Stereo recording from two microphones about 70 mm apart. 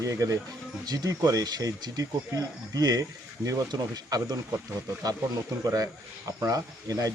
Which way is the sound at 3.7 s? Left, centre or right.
Right.